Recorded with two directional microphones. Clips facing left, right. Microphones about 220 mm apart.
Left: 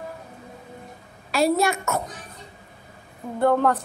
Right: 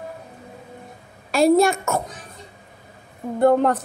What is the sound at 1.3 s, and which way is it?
Speech, 50° right (ahead or behind).